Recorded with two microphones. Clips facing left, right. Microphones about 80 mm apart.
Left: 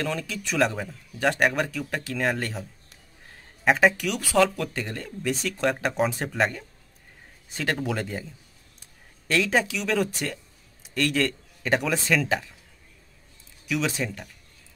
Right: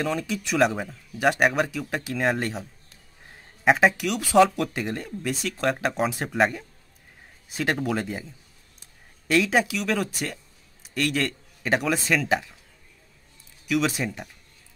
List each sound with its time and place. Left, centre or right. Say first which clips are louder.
0.0 s speech: right 3 dB; centre
3.6 s a man's voice: right 1 dB; centre
4.2 s speech: right 4 dB; right
5.3 s a man's voice: even; centre
9.3 s a man's voice: right 2 dB; centre
13.7 s a man's voice: right 3 dB; centre